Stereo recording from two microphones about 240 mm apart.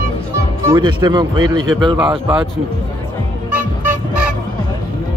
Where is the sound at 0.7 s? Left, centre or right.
Centre.